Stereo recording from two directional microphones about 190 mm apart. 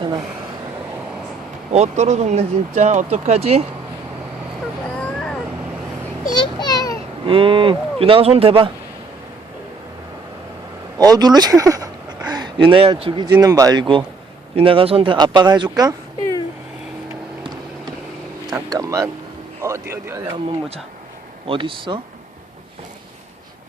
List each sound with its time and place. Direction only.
1.7 s speech: 35° right (ahead or behind)
4.9 s vehicle: 5° left (ahead or behind)
6.3 s a sound: 20° left (ahead or behind)
7.3 s a man's voice: 30° right (ahead or behind)
10.9 s a man's voice: 20° right (ahead or behind)
18.4 s vehicle: 20° right (ahead or behind)
19.6 s speech: 15° right (ahead or behind)
21.4 s a man's voice: 25° right (ahead or behind)